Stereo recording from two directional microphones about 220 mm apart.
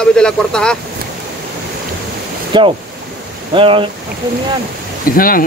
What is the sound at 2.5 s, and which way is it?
Speech, 20° right (ahead or behind).